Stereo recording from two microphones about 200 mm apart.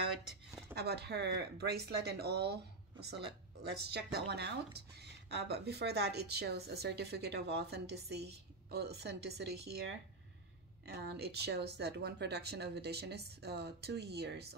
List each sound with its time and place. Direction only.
0.7 s speech: 55° right (ahead or behind)